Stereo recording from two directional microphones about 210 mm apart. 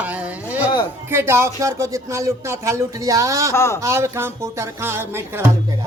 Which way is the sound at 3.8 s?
15° right (ahead or behind).